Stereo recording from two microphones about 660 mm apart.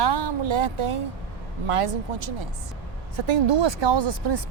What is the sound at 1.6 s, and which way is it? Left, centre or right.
A woman's voice, right.